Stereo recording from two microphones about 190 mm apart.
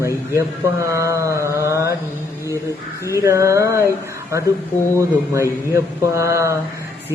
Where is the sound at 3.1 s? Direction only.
15° right (ahead or behind).